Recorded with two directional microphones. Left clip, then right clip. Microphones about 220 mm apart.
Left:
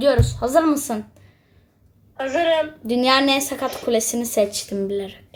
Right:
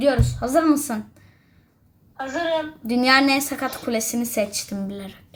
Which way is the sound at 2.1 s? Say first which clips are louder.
Left 5 dB; 45° left (ahead or behind).